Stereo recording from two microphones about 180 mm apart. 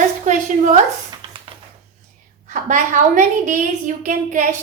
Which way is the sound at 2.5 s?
45° right (ahead or behind).